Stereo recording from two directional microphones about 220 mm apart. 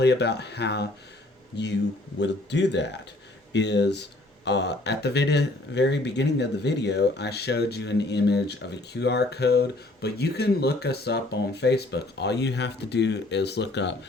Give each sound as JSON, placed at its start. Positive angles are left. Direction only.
{"t": 0.0, "sound": "speech", "side_deg": 50}